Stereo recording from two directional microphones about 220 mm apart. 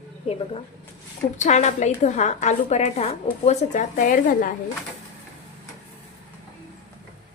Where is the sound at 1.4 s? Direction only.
30° left (ahead or behind).